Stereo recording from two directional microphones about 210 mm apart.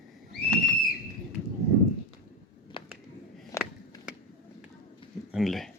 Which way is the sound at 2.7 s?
25° left (ahead or behind).